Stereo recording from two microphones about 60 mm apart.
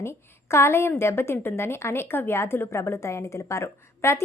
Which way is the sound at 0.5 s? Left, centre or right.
Left.